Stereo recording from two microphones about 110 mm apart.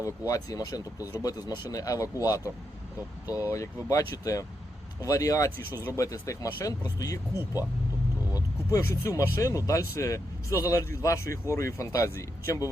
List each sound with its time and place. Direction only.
0.0 s speech: 30° left (ahead or behind)
3.5 s speech: 30° left (ahead or behind)